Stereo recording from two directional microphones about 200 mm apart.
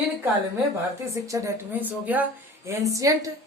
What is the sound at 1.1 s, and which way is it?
Speech, 15° right (ahead or behind).